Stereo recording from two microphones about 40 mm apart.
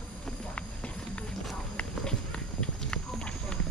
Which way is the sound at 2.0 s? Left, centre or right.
Left.